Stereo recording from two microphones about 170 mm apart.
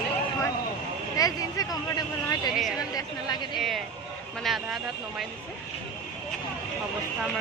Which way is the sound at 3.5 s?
Centre (ahead or behind).